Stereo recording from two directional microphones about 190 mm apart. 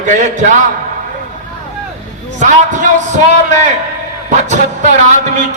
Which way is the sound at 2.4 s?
40° right (ahead or behind).